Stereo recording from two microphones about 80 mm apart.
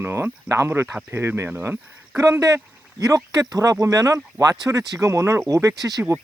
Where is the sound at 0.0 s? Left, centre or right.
Right.